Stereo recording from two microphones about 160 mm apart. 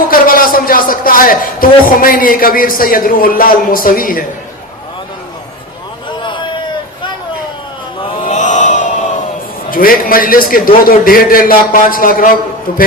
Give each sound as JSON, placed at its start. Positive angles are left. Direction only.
{"t": 0.1, "sound": "a man's voice", "side_deg": 60}
{"t": 6.2, "sound": "a sound", "side_deg": 30}
{"t": 8.2, "sound": "chant", "side_deg": 50}
{"t": 9.6, "sound": "a man's voice", "side_deg": 60}